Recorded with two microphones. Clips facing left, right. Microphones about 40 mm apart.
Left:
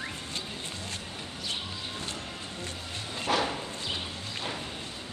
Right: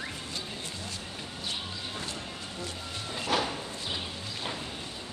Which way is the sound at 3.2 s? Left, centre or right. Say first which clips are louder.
Left 1 dB; left.